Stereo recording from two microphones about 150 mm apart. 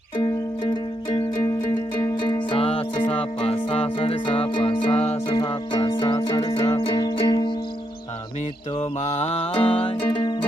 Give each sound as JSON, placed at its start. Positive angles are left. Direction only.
{"t": 2.5, "sound": "music", "side_deg": 40}
{"t": 9.0, "sound": "music", "side_deg": 45}